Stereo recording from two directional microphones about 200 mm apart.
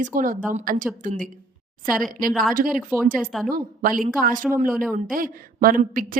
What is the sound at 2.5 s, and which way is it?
Speech, 45° right (ahead or behind).